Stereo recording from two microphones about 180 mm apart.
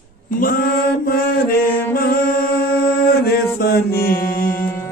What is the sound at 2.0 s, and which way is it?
Mantra, 55° left (ahead or behind).